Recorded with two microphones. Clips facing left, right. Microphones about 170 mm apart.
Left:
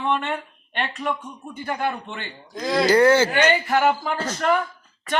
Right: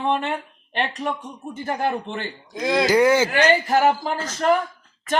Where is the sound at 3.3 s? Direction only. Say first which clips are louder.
Right 1 dB; 40° right (ahead or behind).